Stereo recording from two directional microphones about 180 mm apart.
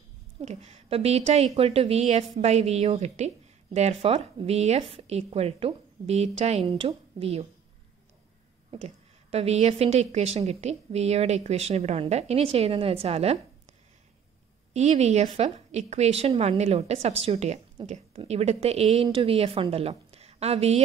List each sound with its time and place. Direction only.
0.4 s a woman's voice: 40° right (ahead or behind)
8.7 s a woman's voice: 35° right (ahead or behind)
14.7 s a woman's voice: 40° right (ahead or behind)